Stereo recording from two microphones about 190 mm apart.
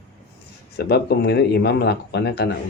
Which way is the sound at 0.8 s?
60° left (ahead or behind).